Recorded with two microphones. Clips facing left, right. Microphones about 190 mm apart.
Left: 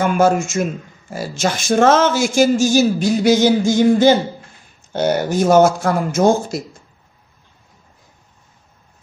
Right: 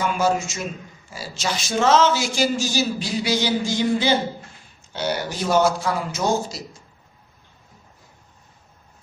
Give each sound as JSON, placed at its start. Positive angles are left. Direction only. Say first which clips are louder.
{"t": 0.0, "sound": "speech", "louder": "left 6 dB", "side_deg": 50}